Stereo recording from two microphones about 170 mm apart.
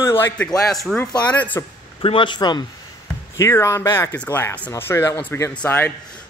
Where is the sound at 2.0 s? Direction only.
30° left (ahead or behind).